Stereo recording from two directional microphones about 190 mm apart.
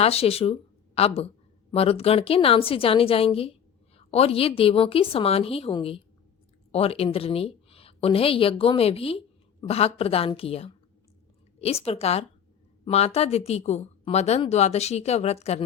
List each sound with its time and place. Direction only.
0.0 s a woman's voice: 30° left (ahead or behind)